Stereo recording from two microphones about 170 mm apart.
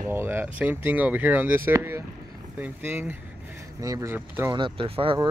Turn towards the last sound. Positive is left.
turn(degrees=-30)  # may be behind; listen again after turning